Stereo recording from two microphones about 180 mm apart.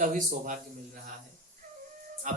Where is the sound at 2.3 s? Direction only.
45° right (ahead or behind).